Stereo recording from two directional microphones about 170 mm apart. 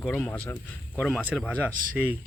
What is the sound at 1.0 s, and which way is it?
Speech, 5° right (ahead or behind).